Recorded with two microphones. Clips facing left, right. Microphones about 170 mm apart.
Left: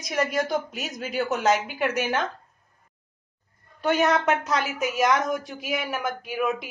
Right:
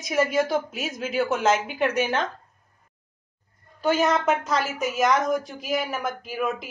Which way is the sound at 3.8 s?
Centre (ahead or behind).